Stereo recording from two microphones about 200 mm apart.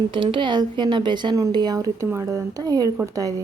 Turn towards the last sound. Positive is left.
turn(degrees=-15)  # may be behind; listen again after turning